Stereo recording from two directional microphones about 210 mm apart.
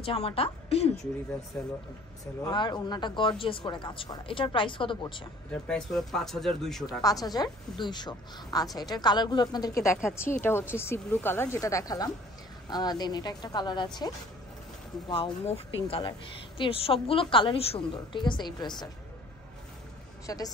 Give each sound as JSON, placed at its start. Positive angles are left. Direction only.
{"t": 0.0, "sound": "a woman's voice", "side_deg": 25}
{"t": 1.5, "sound": "speech", "side_deg": 5}
{"t": 2.4, "sound": "a woman's voice", "side_deg": 20}
{"t": 5.5, "sound": "speech", "side_deg": 5}
{"t": 7.0, "sound": "a woman's voice", "side_deg": 15}
{"t": 15.0, "sound": "a woman's voice", "side_deg": 25}
{"t": 20.2, "sound": "speech", "side_deg": 15}